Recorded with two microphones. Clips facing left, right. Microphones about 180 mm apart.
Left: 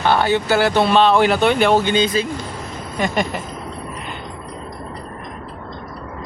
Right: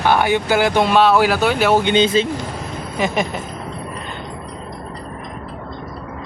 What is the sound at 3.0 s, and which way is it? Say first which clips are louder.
Vehicle: even; centre (ahead or behind).